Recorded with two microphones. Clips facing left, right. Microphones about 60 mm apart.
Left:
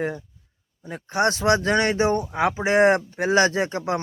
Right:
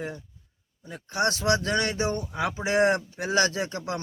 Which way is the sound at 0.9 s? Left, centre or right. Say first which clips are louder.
Left 4 dB; left.